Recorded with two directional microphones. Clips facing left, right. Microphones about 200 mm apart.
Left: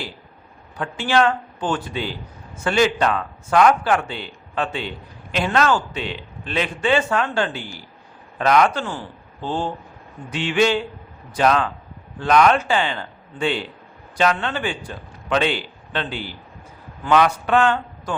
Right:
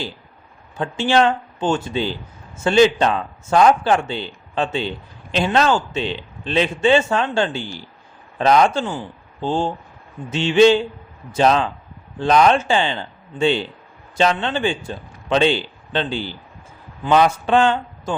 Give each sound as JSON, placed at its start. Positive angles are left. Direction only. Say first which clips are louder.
{"t": 0.8, "sound": "a man's voice", "louder": "right 2 dB", "side_deg": -25}